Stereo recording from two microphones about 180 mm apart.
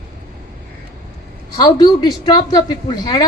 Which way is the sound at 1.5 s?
20° left (ahead or behind).